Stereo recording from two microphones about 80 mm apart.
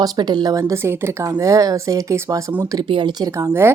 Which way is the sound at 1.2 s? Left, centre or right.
Right.